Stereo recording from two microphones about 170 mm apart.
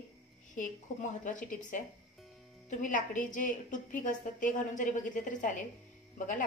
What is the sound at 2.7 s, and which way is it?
A woman's voice, 50° left (ahead or behind).